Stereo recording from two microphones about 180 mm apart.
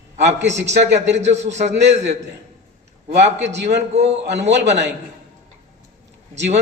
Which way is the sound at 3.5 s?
70° right (ahead or behind).